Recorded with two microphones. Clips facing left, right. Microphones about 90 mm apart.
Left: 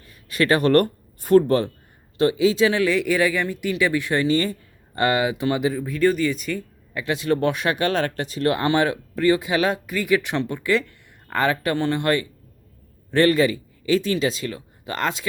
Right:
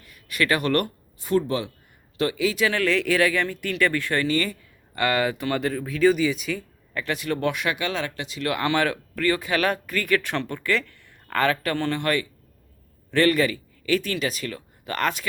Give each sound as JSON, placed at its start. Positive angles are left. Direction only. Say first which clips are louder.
{"t": 0.0, "sound": "a sound", "louder": "left 3 dB", "side_deg": 30}
{"t": 1.2, "sound": "speech", "louder": "left 7 dB", "side_deg": 50}
{"t": 2.1, "sound": "speech", "louder": "left 6 dB", "side_deg": 25}
{"t": 2.8, "sound": "speech", "louder": "left 1 dB", "side_deg": 10}
{"t": 5.6, "sound": "speech", "louder": "right 2 dB", "side_deg": 5}
{"t": 6.9, "sound": "speech", "louder": "left 3 dB", "side_deg": 15}
{"t": 7.2, "sound": "speech", "louder": "left 6 dB", "side_deg": 30}